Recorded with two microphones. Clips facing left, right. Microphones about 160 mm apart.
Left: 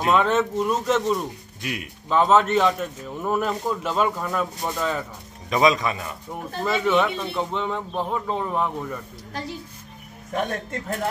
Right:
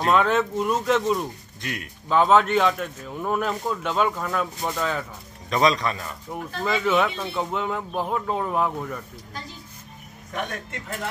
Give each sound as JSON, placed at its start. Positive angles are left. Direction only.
{"t": 0.0, "sound": "a man's voice", "side_deg": 0}
{"t": 1.6, "sound": "speech", "side_deg": 15}
{"t": 2.0, "sound": "a man's voice", "side_deg": 0}
{"t": 10.3, "sound": "a man's voice", "side_deg": 40}